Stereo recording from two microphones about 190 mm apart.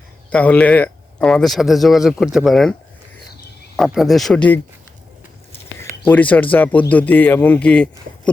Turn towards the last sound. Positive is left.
turn(degrees=5)  # may be behind; listen again after turning